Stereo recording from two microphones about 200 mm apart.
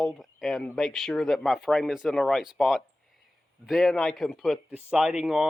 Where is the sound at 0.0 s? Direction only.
Centre (ahead or behind).